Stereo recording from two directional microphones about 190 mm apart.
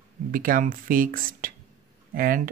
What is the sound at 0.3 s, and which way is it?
A man's voice, 45° right (ahead or behind).